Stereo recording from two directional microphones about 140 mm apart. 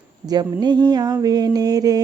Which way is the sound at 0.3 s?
30° right (ahead or behind).